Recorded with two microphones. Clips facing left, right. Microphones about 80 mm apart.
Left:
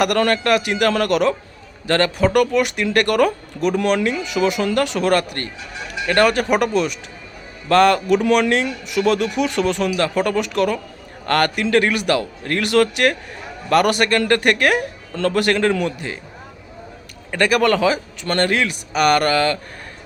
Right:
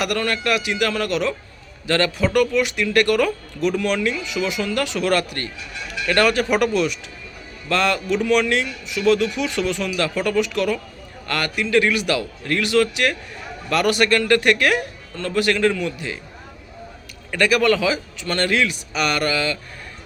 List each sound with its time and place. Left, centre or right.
0.0 s speech: left
0.9 s a man's voice: left
1.9 s speech: left
8.4 s a man's voice: left
9.0 s speech: left
15.3 s speech: left
16.0 s speech: left
17.3 s speech: left
18.5 s speech: left
18.9 s speech: left